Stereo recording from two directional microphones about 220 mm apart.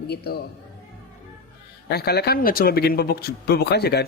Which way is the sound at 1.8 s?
45° left (ahead or behind).